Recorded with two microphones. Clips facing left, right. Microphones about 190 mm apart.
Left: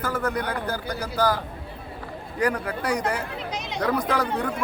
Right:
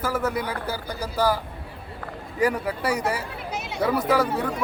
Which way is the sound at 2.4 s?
5° right (ahead or behind).